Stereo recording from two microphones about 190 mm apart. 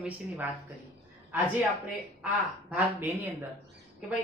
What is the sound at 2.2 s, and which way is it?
Speech, 10° right (ahead or behind).